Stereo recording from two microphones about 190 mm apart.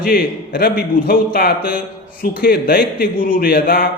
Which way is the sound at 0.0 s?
50° left (ahead or behind).